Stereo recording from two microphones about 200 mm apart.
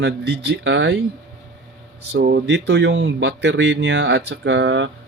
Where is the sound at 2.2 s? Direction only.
55° right (ahead or behind).